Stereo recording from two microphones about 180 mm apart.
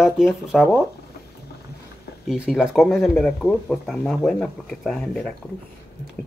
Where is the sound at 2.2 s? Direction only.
5° right (ahead or behind).